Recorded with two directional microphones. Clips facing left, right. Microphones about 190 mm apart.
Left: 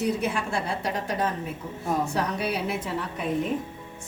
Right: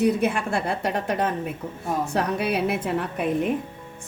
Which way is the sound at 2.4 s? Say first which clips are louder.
Right 4 dB; 60° right (ahead or behind).